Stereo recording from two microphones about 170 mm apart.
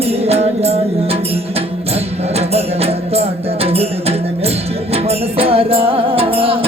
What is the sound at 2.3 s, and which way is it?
Music, 35° right (ahead or behind).